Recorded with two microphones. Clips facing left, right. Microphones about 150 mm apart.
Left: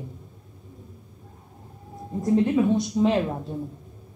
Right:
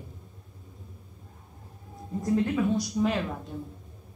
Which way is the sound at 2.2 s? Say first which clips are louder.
Left 5 dB; 25° left (ahead or behind).